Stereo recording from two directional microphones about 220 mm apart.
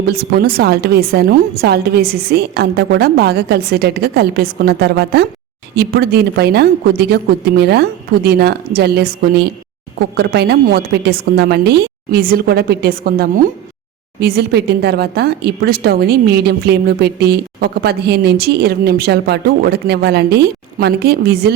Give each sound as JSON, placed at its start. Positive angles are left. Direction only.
{"t": 0.0, "sound": "speech", "side_deg": -45}